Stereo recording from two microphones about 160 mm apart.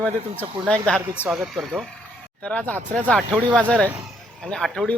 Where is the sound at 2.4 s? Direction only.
10° left (ahead or behind).